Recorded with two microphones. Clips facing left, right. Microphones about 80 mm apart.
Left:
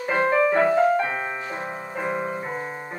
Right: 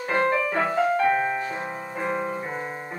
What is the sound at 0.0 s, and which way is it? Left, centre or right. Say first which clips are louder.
Music: left 3 dB; centre.